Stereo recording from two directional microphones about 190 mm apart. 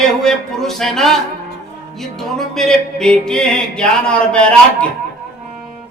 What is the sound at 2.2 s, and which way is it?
Music, centre (ahead or behind).